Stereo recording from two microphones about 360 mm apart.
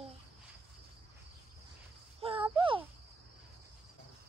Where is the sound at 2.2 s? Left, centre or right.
Centre.